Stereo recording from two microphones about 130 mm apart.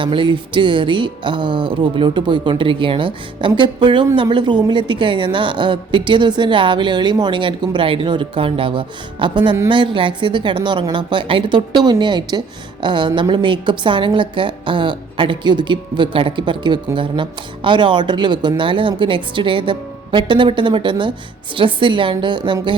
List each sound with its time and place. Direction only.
0.0 s a woman's voice: 40° right (ahead or behind)